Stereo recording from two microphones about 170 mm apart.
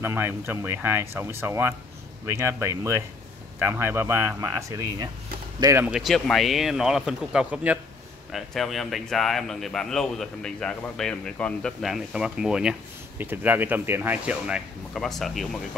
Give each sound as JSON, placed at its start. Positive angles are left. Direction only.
{"t": 0.0, "sound": "speech", "side_deg": -15}
{"t": 5.9, "sound": "speech", "side_deg": 0}